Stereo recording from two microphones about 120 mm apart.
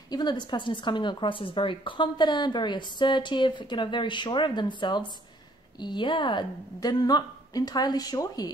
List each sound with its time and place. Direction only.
0.1 s a woman's voice: 35° left (ahead or behind)